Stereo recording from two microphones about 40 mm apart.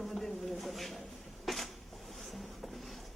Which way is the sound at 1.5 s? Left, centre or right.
Centre.